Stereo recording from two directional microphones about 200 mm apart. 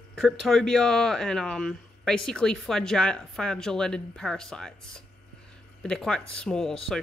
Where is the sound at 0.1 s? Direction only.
Centre (ahead or behind).